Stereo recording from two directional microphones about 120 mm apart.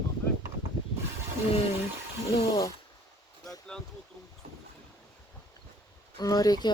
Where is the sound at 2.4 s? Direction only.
30° left (ahead or behind).